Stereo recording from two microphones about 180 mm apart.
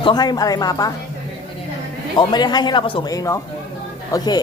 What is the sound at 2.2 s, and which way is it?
Speech, 25° left (ahead or behind).